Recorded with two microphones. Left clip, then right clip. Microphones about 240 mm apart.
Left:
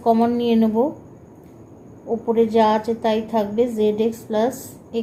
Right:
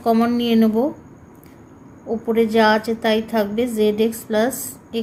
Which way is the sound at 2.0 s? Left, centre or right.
Right.